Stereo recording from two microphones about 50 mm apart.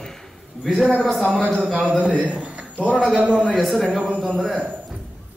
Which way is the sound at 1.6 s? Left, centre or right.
Right.